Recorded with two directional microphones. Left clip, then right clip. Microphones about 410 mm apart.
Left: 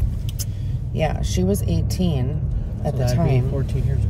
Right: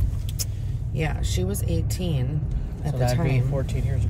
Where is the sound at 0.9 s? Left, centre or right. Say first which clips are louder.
Left 7 dB; centre.